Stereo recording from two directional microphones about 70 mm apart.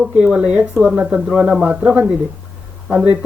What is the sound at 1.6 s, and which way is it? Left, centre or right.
Speech, centre.